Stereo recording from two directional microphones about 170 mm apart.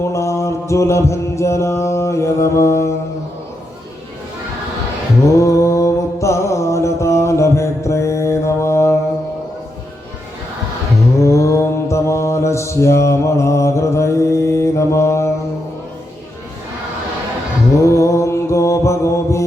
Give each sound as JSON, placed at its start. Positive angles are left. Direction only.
{"t": 0.1, "sound": "mantra", "side_deg": 15}
{"t": 5.4, "sound": "music", "side_deg": 15}
{"t": 11.2, "sound": "mantra", "side_deg": 15}
{"t": 17.7, "sound": "mantra", "side_deg": 15}